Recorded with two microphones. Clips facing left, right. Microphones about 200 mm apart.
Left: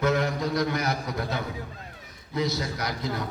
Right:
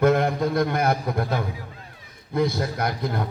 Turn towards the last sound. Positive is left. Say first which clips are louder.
# right 4 dB
turn(degrees=-55)  # may be behind; listen again after turning